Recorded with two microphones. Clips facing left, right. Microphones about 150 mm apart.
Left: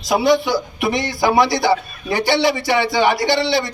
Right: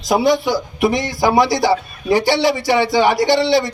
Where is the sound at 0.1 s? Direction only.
40° right (ahead or behind).